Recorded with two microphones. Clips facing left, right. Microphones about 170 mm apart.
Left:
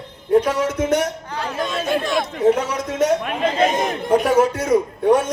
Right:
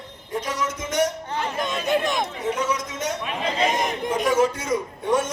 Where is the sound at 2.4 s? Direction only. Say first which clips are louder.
Left 11 dB; 60° left (ahead or behind).